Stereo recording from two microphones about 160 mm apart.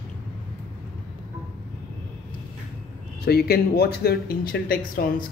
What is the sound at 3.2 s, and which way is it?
Speech, 80° left.